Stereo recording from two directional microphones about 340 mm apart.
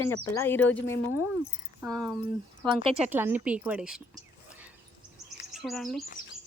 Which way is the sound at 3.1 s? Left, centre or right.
Centre.